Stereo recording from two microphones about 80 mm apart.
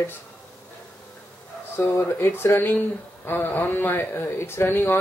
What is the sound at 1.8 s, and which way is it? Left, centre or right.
A man's voice, left.